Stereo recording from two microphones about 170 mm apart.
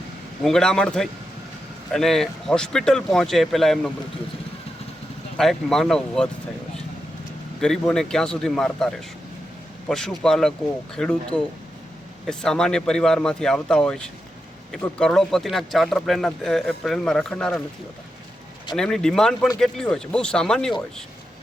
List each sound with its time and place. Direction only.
0.4 s speech: 5° left (ahead or behind)
5.4 s speech: centre (ahead or behind)
7.6 s speech: 5° left (ahead or behind)
18.8 s speech: 5° left (ahead or behind)